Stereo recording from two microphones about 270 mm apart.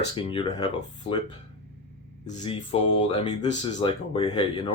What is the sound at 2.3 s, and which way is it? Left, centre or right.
Speech, left.